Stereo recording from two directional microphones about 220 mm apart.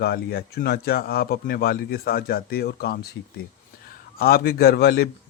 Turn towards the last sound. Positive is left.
turn(degrees=45)  # may be behind; listen again after turning